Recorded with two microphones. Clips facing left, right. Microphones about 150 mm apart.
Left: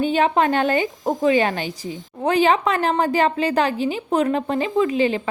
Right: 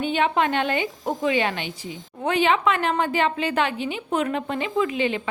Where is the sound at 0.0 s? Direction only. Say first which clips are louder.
Left 4 dB; 40° left (ahead or behind).